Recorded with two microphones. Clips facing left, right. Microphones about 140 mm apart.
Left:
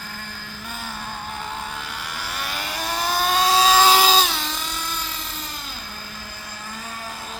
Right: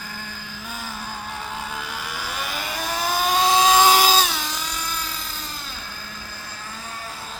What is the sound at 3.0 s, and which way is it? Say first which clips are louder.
Vehicle: even; 5° right (ahead or behind).